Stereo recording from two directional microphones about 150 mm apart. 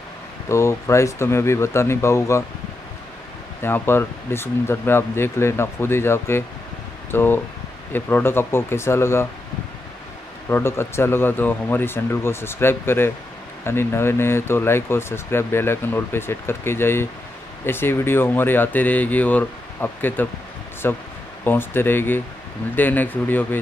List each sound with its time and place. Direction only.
0.5 s speech: 20° left (ahead or behind)
3.6 s speech: 15° left (ahead or behind)
10.5 s speech: 15° left (ahead or behind)